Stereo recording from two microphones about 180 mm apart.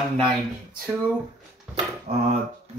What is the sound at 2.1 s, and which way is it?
Speech, 35° right (ahead or behind).